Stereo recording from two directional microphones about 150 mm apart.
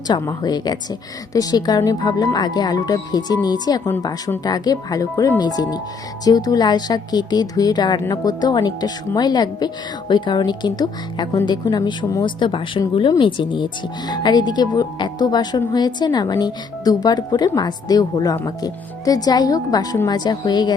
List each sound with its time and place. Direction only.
0.1 s a woman's voice: 25° left (ahead or behind)